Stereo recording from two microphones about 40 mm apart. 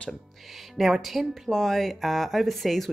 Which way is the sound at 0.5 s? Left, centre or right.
Centre.